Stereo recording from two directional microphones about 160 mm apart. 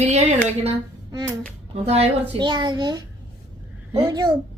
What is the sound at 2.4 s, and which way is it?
A child's voice, 30° right (ahead or behind).